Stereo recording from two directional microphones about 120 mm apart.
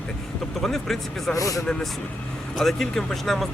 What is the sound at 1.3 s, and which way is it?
Speech, 30° left (ahead or behind).